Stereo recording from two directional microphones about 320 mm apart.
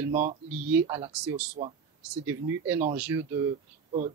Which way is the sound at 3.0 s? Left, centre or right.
Centre.